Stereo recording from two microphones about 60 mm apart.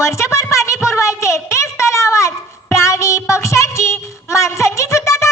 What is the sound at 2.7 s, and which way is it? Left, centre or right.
Music, left.